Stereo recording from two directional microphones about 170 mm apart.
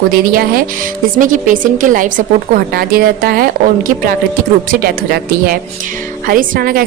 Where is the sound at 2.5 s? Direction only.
65° right (ahead or behind).